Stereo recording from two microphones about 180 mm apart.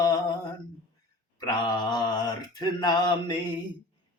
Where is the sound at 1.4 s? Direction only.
20° left (ahead or behind).